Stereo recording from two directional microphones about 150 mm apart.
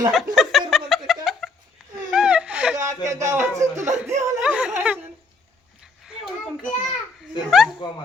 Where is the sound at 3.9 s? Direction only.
50° right (ahead or behind).